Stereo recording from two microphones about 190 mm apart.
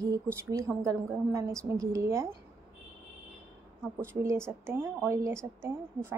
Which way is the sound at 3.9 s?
15° right (ahead or behind).